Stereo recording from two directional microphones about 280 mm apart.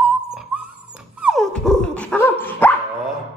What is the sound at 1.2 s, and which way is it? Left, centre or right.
Dog, centre.